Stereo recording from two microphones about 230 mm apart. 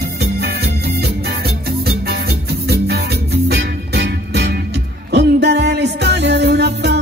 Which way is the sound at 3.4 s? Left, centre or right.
Right.